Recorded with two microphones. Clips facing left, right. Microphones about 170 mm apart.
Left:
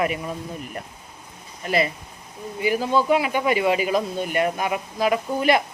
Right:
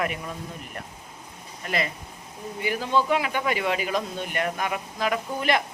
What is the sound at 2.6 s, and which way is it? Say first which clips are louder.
Speech: left 4 dB; 10° left (ahead or behind).